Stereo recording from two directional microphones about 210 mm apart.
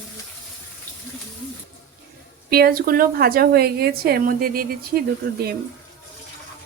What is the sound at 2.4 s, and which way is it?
A woman's voice, 45° right (ahead or behind).